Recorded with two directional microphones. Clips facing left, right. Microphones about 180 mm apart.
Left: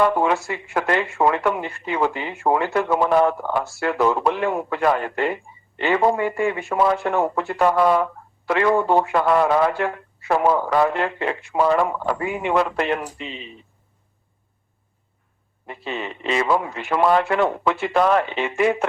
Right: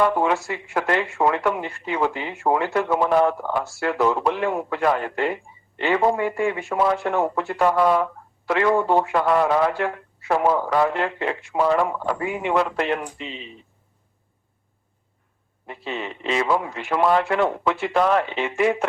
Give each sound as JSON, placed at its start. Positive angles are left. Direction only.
{"t": 0.0, "sound": "speech", "side_deg": 55}
{"t": 15.6, "sound": "speech", "side_deg": 55}